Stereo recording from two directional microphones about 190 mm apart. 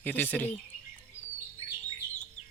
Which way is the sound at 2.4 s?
40° left (ahead or behind).